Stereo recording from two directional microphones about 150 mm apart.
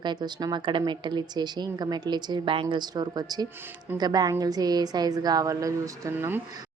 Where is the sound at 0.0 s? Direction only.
30° right (ahead or behind).